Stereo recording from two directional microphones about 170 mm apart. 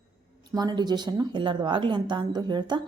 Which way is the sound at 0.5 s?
25° right (ahead or behind).